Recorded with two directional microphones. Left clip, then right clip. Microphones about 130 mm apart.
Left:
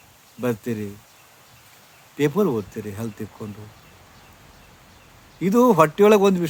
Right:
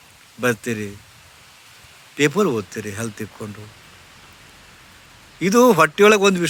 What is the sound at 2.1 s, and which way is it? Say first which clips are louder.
A man's voice: right 3 dB; 15° left (ahead or behind).